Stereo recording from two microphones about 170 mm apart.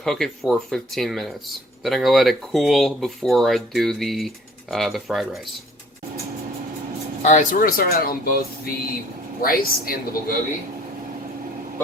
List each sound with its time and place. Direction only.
0.0 s speech: centre (ahead or behind)
7.3 s speech: 45° left (ahead or behind)
7.8 s speech: 65° left (ahead or behind)